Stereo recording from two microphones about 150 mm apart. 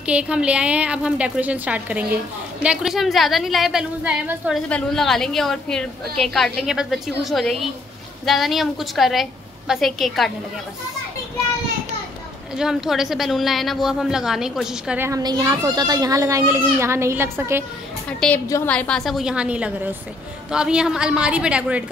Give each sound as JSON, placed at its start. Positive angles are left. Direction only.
{"t": 0.0, "sound": "a woman's voice", "side_deg": -5}
{"t": 4.6, "sound": "a woman's voice", "side_deg": 5}
{"t": 12.5, "sound": "a woman's voice", "side_deg": -5}
{"t": 15.0, "sound": "a child's voice", "side_deg": -20}
{"t": 18.2, "sound": "a woman's voice", "side_deg": 5}